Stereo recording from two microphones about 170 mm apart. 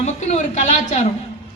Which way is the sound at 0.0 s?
45° left (ahead or behind).